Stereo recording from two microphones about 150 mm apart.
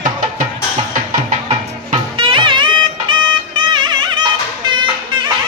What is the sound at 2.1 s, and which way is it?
Music, 35° right (ahead or behind).